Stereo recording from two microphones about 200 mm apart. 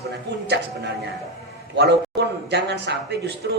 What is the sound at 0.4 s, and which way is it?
Speech, 60° right (ahead or behind).